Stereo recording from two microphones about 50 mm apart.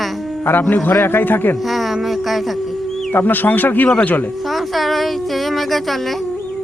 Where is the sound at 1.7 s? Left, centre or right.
Centre.